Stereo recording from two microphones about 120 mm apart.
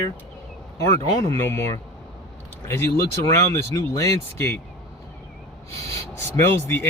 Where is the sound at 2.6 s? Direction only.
20° left (ahead or behind).